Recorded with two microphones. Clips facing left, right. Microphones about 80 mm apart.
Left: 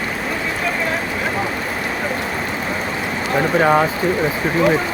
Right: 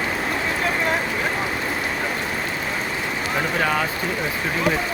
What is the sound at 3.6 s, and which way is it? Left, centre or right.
Speech, left.